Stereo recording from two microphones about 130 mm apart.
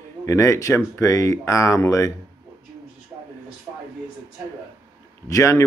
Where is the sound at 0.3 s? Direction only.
25° left (ahead or behind).